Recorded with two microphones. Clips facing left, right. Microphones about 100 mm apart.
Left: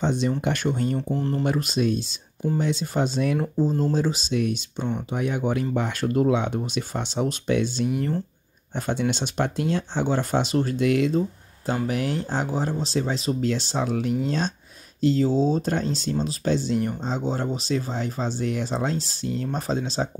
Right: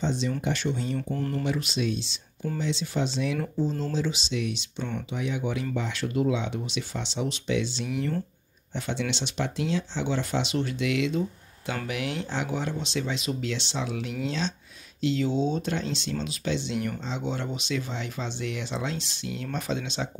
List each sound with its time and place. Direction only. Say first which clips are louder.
0.0 s speech: left 4 dB; 55° left (ahead or behind)
0.9 s speech: left 4 dB; 25° left (ahead or behind)
1.4 s speech: left 5 dB; 45° left (ahead or behind)